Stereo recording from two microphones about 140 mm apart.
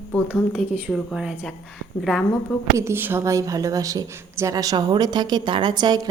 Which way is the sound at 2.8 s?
15° right (ahead or behind).